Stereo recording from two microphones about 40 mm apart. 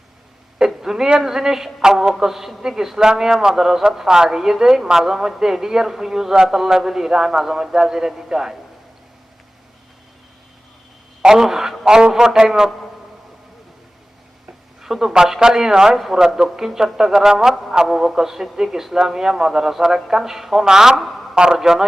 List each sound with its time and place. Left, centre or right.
0.8 s a woman's voice: centre
11.2 s a man's voice: centre
11.4 s a sound: centre
11.9 s a woman's voice: centre
14.8 s a woman's voice: centre
16.0 s a man's voice: centre